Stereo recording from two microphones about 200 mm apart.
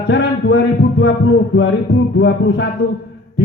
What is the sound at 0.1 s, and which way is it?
Speech, 60° left (ahead or behind).